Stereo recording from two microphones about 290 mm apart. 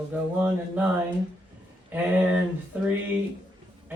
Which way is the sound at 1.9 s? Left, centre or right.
Centre.